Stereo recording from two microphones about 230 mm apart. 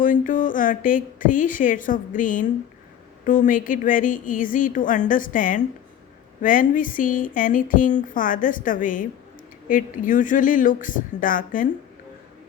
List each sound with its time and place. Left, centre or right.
0.0 s speech: left